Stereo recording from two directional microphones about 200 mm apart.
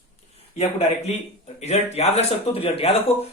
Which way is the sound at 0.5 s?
30° left (ahead or behind).